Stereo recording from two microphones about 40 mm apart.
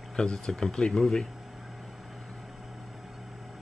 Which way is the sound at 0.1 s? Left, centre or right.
Left.